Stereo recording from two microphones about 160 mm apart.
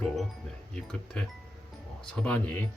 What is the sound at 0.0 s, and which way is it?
Music, 5° left (ahead or behind).